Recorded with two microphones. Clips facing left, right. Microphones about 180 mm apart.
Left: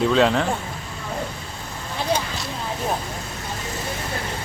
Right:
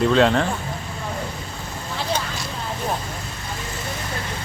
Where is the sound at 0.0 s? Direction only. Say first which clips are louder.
Right 1 dB; centre (ahead or behind).